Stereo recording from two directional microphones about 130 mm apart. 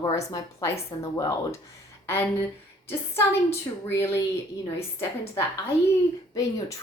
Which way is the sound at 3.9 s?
20° left (ahead or behind).